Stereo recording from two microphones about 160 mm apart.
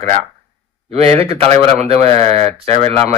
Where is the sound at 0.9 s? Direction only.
40° right (ahead or behind).